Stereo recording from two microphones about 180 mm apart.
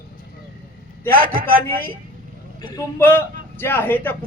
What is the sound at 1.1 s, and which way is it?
Speech, 55° right (ahead or behind).